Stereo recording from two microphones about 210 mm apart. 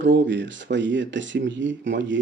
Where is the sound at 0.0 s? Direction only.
60° right (ahead or behind).